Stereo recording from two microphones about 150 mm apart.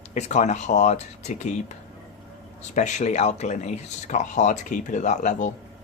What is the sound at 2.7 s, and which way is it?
Speech, 55° left (ahead or behind).